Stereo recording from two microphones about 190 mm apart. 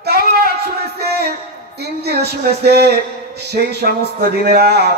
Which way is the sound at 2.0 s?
55° right (ahead or behind).